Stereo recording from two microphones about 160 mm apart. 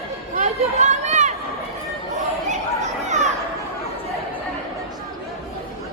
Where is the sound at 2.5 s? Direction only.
50° right (ahead or behind).